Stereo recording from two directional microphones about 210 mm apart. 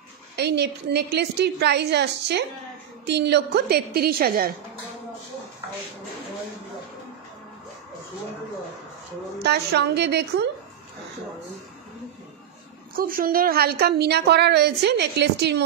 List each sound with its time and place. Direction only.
0.4 s a woman's voice: 50° right (ahead or behind)
9.4 s a woman's voice: 50° right (ahead or behind)
12.9 s a woman's voice: 40° right (ahead or behind)